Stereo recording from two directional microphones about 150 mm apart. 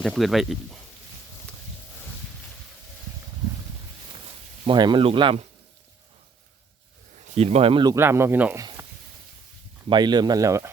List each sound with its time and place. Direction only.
0.0 s speech: centre (ahead or behind)
4.6 s speech: 30° right (ahead or behind)
7.3 s speech: 45° right (ahead or behind)
7.9 s speech: 15° right (ahead or behind)
8.5 s a sound: 20° right (ahead or behind)
9.9 s speech: 30° right (ahead or behind)